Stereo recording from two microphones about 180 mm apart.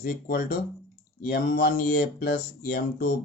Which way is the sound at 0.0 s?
55° left (ahead or behind).